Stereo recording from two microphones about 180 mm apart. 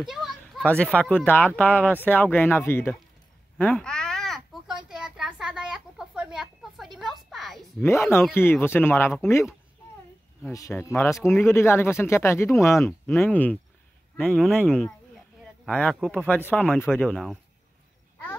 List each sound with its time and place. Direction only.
0.0 s speech: centre (ahead or behind)
3.5 s a sound: 10° left (ahead or behind)
7.8 s speech: 15° left (ahead or behind)